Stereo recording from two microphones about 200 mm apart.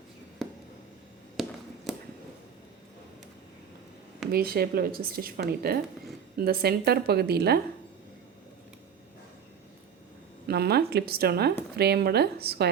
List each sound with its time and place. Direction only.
0.4 s a sound: centre (ahead or behind)
4.3 s a woman's voice: 50° right (ahead or behind)
10.5 s a woman's voice: 50° right (ahead or behind)